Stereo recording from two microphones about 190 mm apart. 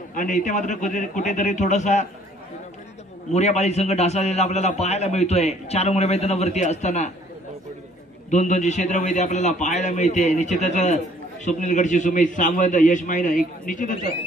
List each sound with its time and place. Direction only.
0.1 s a man's voice: 45° left (ahead or behind)
3.3 s a man's voice: 35° left (ahead or behind)
8.3 s a man's voice: 40° left (ahead or behind)